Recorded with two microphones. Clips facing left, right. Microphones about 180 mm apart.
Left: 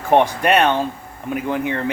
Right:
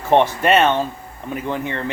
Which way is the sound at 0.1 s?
10° left (ahead or behind).